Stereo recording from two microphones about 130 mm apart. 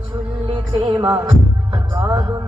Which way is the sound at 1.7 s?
30° right (ahead or behind).